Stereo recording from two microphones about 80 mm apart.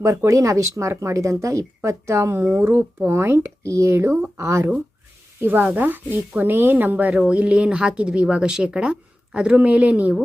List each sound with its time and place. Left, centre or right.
0.3 s speech: right
5.4 s speech: right